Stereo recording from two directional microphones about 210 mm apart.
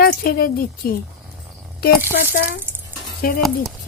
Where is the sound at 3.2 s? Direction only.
45° left (ahead or behind).